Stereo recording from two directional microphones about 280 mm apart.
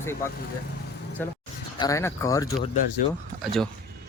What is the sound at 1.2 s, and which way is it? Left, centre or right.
Speech, centre.